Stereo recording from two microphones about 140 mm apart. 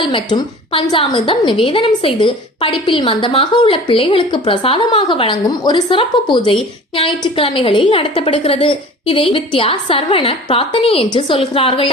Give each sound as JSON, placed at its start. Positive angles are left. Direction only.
{"t": 0.1, "sound": "a woman's voice", "side_deg": 35}